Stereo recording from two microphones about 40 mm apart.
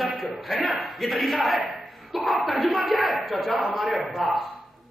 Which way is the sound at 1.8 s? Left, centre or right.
Centre.